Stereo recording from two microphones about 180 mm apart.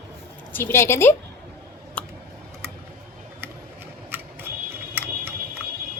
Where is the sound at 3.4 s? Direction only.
10° right (ahead or behind).